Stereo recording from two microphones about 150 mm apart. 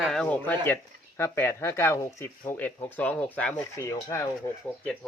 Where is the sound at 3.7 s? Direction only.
20° left (ahead or behind).